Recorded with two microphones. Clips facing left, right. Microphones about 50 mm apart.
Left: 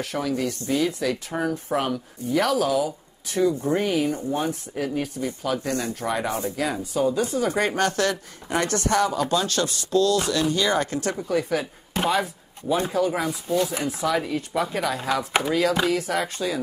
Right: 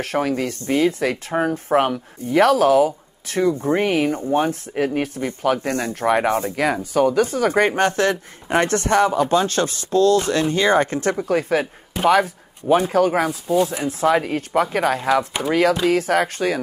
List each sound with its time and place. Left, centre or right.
0.0 s speech: right
7.6 s speech: right